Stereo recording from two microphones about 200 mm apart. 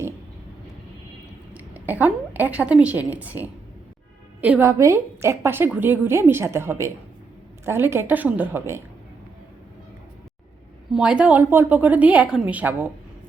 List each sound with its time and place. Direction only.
1.5 s a woman's voice: 10° right (ahead or behind)
10.9 s a woman's voice: 5° right (ahead or behind)